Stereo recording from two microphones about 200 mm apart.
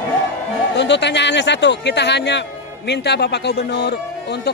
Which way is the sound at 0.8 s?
60° left (ahead or behind).